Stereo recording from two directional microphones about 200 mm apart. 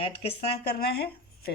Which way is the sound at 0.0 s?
30° left (ahead or behind).